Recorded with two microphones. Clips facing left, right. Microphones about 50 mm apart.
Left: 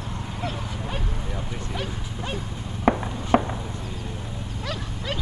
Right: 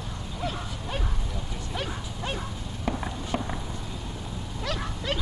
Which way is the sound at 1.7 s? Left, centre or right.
Centre.